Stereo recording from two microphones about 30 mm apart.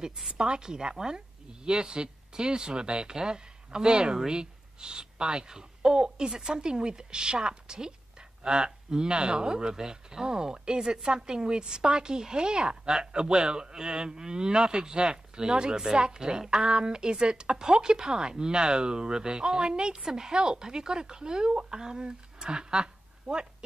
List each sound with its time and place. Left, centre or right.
0.3 s a woman's voice: right
20.0 s a woman's voice: centre
20.3 s a woman's voice: right